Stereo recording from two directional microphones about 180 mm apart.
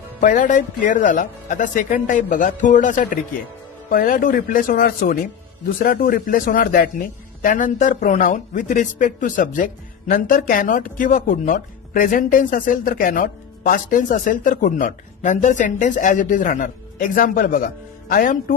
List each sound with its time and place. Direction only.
0.2 s a man's voice: 45° left (ahead or behind)